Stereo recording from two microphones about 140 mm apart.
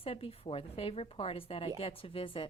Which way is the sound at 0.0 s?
40° left (ahead or behind).